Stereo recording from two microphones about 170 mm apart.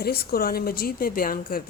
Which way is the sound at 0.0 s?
65° left (ahead or behind).